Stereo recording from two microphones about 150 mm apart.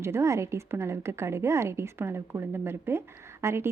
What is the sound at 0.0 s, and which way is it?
A woman's voice, 20° right (ahead or behind).